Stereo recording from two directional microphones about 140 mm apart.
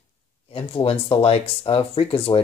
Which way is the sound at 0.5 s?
40° left (ahead or behind).